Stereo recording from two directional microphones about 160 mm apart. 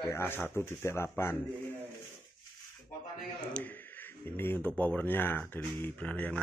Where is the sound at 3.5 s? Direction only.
10° left (ahead or behind).